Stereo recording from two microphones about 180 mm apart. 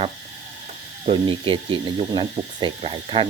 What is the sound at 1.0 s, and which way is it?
Speech, 30° right (ahead or behind).